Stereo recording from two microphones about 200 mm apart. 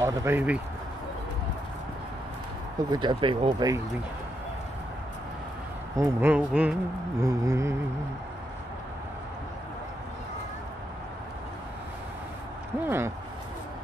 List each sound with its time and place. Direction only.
0.0 s a man's voice: 10° right (ahead or behind)
2.9 s speech: 20° right (ahead or behind)
5.9 s a man's voice: 15° right (ahead or behind)
12.8 s a man's voice: 10° right (ahead or behind)